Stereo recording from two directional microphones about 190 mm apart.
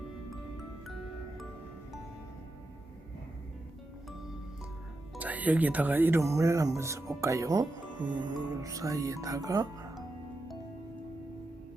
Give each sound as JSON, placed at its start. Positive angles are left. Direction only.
{"t": 5.1, "sound": "speech", "side_deg": -10}